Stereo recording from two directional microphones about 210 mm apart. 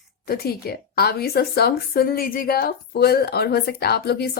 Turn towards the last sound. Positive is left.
turn(degrees=50)  # may be behind; listen again after turning